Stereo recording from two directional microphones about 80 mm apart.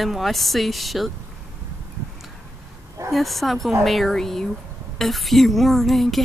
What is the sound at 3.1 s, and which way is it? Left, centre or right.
Speech, centre.